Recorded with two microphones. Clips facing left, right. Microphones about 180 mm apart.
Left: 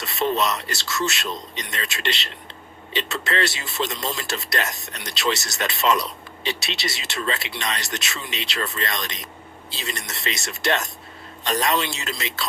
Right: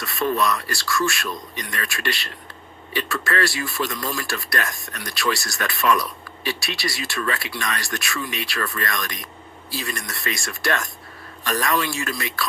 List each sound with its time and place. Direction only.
0.0 s speech: 20° left (ahead or behind)